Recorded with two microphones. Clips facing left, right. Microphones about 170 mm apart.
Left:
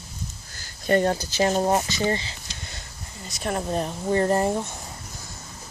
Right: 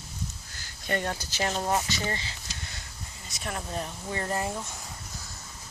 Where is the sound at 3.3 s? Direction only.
40° left (ahead or behind).